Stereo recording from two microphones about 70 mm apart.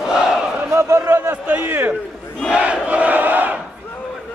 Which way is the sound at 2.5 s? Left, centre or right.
Centre.